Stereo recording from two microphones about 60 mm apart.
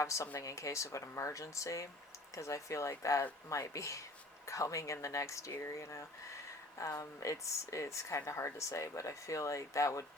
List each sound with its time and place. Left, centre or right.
0.0 s speech: left